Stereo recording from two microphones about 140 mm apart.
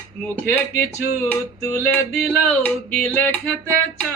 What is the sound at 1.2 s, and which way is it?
Music, 15° left (ahead or behind).